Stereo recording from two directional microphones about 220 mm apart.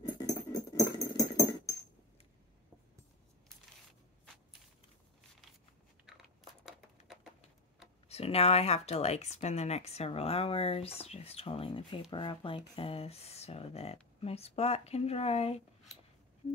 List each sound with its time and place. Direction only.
0.2 s music: 15° left (ahead or behind)
6.0 s crunch: centre (ahead or behind)
8.1 s speech: 25° left (ahead or behind)